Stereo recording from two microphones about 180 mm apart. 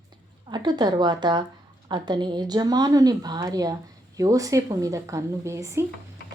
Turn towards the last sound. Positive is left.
turn(degrees=-15)  # may be behind; listen again after turning